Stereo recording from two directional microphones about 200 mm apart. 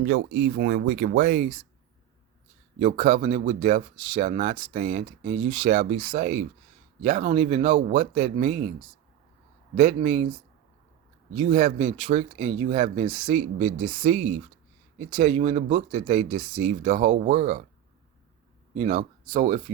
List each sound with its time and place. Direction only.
0.0 s speech: 55° right (ahead or behind)
2.7 s speech: 40° right (ahead or behind)
9.8 s speech: 30° right (ahead or behind)
11.3 s speech: 40° right (ahead or behind)
11.9 s speech: 25° right (ahead or behind)
14.0 s speech: 35° right (ahead or behind)
16.6 s speech: 40° right (ahead or behind)
18.8 s speech: 35° right (ahead or behind)